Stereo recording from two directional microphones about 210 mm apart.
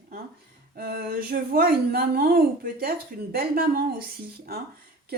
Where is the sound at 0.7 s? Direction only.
45° right (ahead or behind).